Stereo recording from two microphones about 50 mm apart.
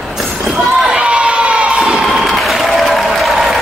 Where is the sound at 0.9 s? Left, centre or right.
Right.